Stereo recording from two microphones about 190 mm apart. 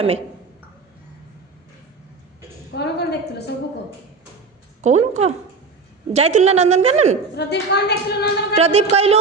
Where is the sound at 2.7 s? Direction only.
60° left (ahead or behind).